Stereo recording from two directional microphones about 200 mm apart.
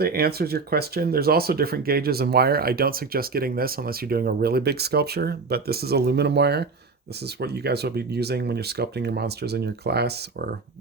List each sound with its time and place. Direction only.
0.0 s speech: 50° right (ahead or behind)